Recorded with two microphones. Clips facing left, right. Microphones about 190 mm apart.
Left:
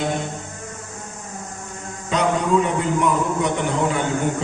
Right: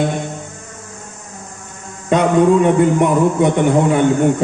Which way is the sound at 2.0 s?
55° right (ahead or behind).